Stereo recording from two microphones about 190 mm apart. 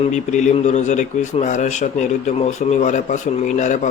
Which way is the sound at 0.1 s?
40° left (ahead or behind).